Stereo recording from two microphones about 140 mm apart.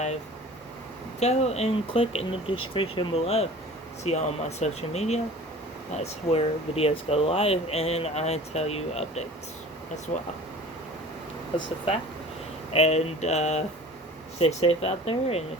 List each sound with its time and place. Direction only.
1.2 s speech: 50° left (ahead or behind)
12.7 s speech: 50° left (ahead or behind)